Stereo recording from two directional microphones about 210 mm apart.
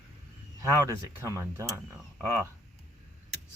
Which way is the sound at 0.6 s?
15° right (ahead or behind).